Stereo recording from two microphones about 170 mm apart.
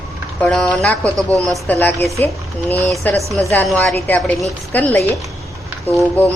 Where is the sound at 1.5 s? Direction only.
10° left (ahead or behind).